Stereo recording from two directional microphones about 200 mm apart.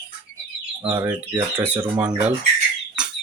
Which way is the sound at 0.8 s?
10° right (ahead or behind).